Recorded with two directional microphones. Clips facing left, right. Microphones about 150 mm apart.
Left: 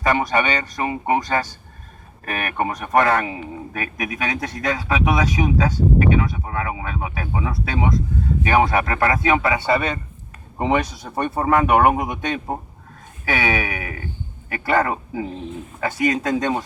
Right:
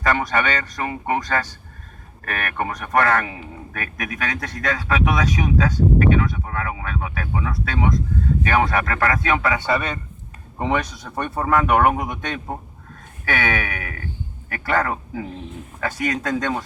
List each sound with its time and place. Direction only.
0.0 s a man's voice: 15° left (ahead or behind)
10.6 s a man's voice: 10° left (ahead or behind)